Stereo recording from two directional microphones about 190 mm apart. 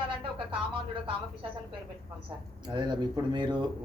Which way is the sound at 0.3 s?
25° right (ahead or behind).